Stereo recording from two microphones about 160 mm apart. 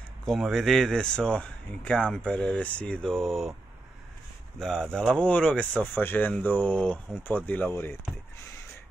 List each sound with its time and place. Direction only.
0.2 s speech: centre (ahead or behind)
4.6 s speech: 5° left (ahead or behind)